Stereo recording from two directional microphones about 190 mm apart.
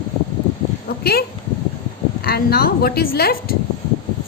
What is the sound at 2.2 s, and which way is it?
A woman's voice, 55° left (ahead or behind).